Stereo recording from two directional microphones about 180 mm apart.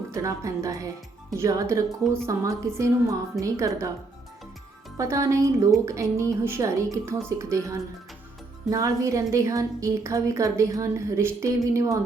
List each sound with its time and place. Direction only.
0.1 s a woman's voice: 15° right (ahead or behind)
4.9 s a woman's voice: 15° right (ahead or behind)